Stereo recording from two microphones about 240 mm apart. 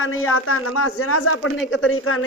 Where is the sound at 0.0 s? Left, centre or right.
Left.